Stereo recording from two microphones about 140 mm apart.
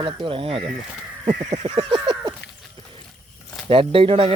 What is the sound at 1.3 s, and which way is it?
Speech, 55° right (ahead or behind).